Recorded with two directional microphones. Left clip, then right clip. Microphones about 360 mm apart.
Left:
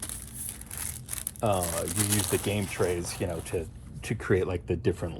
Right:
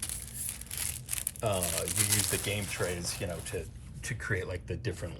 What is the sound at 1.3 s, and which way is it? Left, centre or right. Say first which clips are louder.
Speech: left 5 dB; centre.